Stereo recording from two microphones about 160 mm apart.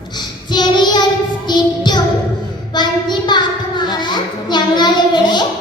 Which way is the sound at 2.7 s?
25° left (ahead or behind).